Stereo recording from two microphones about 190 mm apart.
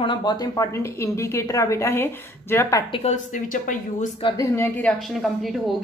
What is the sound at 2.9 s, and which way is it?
Speech, 35° left (ahead or behind).